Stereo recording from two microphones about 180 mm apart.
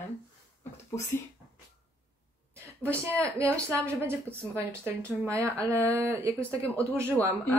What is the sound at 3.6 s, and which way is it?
Speech, 15° right (ahead or behind).